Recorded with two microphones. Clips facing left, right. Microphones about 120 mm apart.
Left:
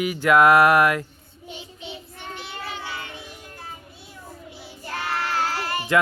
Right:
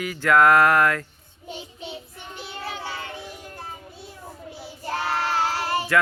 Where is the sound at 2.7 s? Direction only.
35° right (ahead or behind).